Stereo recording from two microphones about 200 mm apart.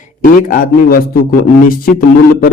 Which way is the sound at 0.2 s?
45° left (ahead or behind).